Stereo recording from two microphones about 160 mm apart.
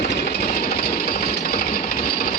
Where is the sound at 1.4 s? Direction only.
65° left (ahead or behind).